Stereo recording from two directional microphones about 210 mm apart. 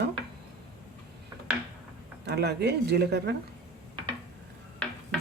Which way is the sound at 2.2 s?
50° right (ahead or behind).